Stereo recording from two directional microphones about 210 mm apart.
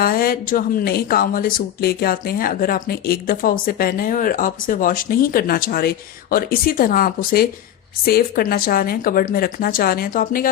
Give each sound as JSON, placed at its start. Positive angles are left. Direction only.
{"t": 0.0, "sound": "speech", "side_deg": 45}